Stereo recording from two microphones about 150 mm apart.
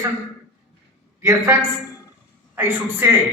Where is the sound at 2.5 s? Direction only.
15° right (ahead or behind).